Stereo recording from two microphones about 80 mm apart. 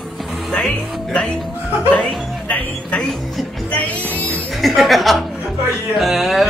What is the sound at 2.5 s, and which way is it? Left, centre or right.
Music, centre.